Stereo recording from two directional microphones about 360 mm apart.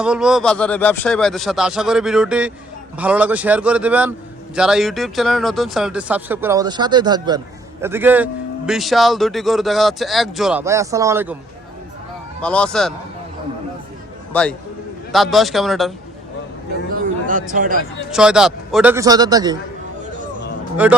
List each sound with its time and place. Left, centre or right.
0.0 s speech: centre
12.4 s speech: centre
14.3 s speech: centre
16.9 s a sound: right
17.5 s speech: right
18.1 s speech: centre
20.8 s speech: centre